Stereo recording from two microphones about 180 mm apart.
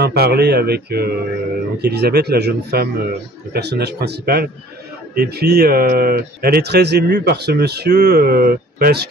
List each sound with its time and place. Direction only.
0.0 s speech: 65° right (ahead or behind)